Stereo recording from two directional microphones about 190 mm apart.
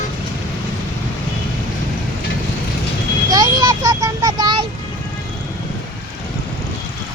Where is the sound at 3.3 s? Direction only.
20° right (ahead or behind).